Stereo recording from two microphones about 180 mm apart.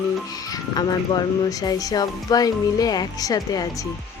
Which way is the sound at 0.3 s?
20° left (ahead or behind).